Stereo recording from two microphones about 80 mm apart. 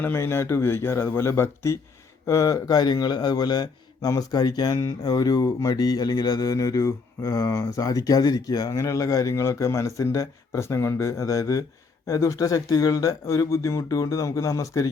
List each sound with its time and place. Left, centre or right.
0.0 s speech: left
4.8 s speech: left
5.1 s speech: left
7.8 s speech: left